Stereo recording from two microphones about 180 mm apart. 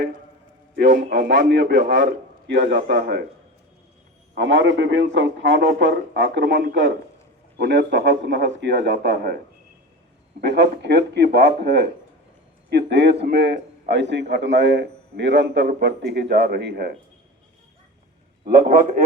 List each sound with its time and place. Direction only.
0.8 s a man's voice: 70° right (ahead or behind)
4.4 s a man's voice: 90° right
7.6 s a man's voice: 75° right (ahead or behind)
10.4 s a man's voice: 75° right (ahead or behind)
18.4 s a man's voice: 55° right (ahead or behind)